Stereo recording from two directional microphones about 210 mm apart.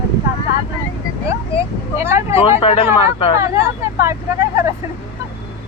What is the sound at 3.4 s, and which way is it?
Speech, 15° right (ahead or behind).